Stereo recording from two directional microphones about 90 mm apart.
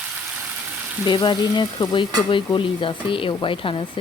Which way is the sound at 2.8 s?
75° left (ahead or behind).